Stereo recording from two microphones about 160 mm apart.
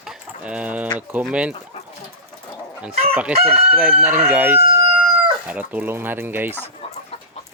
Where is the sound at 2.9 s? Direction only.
40° right (ahead or behind).